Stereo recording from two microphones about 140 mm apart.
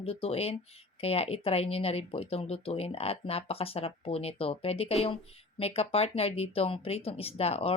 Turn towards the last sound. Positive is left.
turn(degrees=45)  # may be behind; listen again after turning